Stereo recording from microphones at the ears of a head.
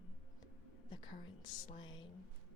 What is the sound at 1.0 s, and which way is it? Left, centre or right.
Speech, left.